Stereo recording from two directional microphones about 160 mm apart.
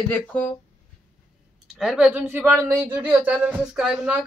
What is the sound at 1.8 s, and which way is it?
Speech, 5° right (ahead or behind).